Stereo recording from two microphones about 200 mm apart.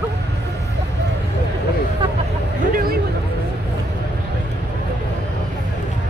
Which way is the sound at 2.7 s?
45° right (ahead or behind).